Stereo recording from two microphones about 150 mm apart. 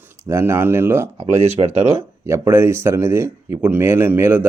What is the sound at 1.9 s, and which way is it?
Speech, 15° right (ahead or behind).